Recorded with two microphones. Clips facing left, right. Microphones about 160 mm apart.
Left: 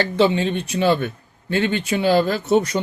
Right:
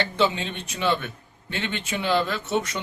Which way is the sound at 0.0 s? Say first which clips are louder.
Left 6 dB; 35° left (ahead or behind).